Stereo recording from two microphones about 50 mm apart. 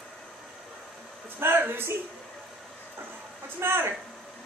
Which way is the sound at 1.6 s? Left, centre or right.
Right.